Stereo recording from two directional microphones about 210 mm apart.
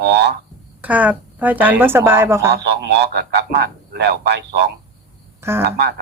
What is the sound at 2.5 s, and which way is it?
A man's voice, 55° right (ahead or behind).